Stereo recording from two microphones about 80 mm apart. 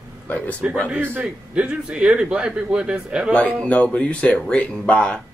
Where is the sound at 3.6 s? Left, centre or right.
Centre.